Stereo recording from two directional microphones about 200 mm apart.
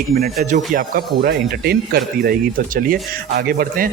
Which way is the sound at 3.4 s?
50° right (ahead or behind).